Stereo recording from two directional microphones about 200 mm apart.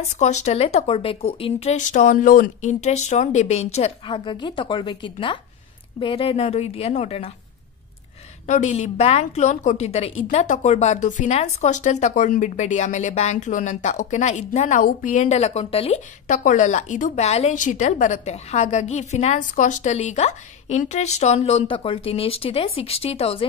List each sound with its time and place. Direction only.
0.1 s a woman's voice: 35° left (ahead or behind)
8.5 s speech: 35° left (ahead or behind)